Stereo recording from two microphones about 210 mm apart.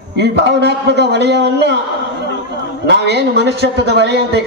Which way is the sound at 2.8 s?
50° right (ahead or behind).